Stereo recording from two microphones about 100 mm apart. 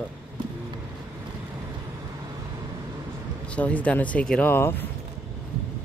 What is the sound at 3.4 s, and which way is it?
Speech, 15° left (ahead or behind).